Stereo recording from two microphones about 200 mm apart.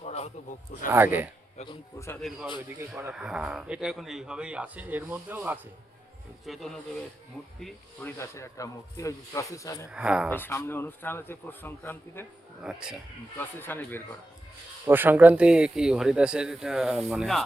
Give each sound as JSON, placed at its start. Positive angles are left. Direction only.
{"t": 0.0, "sound": "a man's voice", "side_deg": 35}
{"t": 0.9, "sound": "speech", "side_deg": -10}
{"t": 2.2, "sound": "speech", "side_deg": 0}
{"t": 2.7, "sound": "speech", "side_deg": -10}
{"t": 7.6, "sound": "speech", "side_deg": 10}
{"t": 9.9, "sound": "speech", "side_deg": -5}
{"t": 10.2, "sound": "speech", "side_deg": 10}
{"t": 12.6, "sound": "speech", "side_deg": -5}
{"t": 13.3, "sound": "speech", "side_deg": 10}
{"t": 14.8, "sound": "speech", "side_deg": -10}